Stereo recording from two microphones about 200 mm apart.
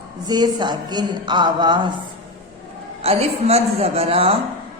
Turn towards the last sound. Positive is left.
turn(degrees=-30)  # may be behind; listen again after turning